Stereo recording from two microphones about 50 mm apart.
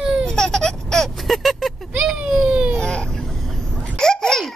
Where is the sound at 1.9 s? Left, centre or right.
Right.